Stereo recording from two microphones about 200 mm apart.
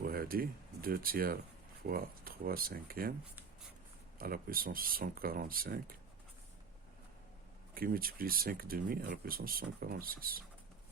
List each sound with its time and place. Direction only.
0.0 s speech: 45° right (ahead or behind)
4.2 s speech: 45° right (ahead or behind)
7.7 s speech: 45° right (ahead or behind)